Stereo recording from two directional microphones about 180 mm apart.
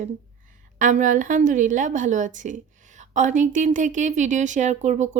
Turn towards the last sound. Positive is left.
turn(degrees=-40)  # may be behind; listen again after turning